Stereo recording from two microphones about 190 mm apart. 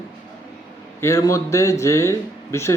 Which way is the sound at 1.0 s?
15° left (ahead or behind).